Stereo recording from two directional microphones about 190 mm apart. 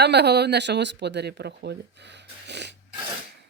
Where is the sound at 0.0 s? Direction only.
60° right (ahead or behind).